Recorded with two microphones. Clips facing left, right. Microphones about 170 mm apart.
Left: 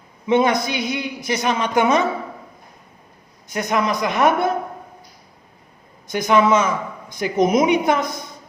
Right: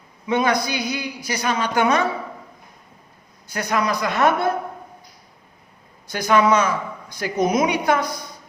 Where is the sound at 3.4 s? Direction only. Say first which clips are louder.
Left 2 dB; 20° left (ahead or behind).